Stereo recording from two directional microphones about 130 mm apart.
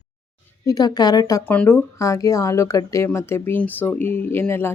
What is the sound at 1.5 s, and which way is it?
Speech, 15° left (ahead or behind).